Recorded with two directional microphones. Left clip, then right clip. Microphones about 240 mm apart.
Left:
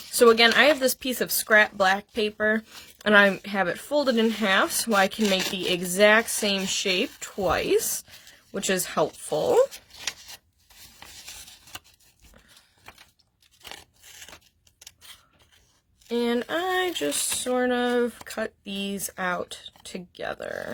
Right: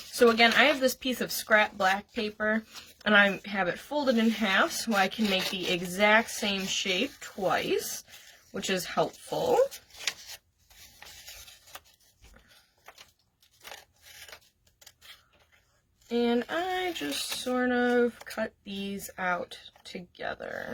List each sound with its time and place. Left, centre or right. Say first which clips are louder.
0.1 s speech: left 4 dB; left
10.0 s a sound: even; centre
16.0 s speech: left 2 dB; left